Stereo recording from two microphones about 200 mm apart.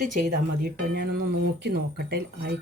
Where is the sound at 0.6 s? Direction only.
50° right (ahead or behind).